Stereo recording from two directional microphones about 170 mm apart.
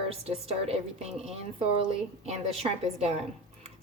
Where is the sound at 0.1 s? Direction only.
35° right (ahead or behind).